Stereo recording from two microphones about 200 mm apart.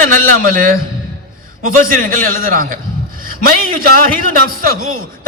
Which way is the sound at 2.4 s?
45° right (ahead or behind).